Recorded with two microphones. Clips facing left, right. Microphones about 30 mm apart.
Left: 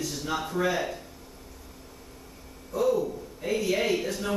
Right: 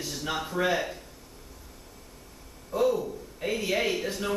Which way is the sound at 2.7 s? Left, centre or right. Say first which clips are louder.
Right 2 dB; right.